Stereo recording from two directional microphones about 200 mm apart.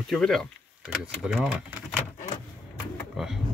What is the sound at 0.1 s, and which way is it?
Speech, centre (ahead or behind).